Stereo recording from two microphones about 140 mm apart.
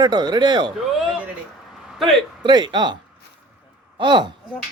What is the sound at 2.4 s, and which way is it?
Speech, 35° right (ahead or behind).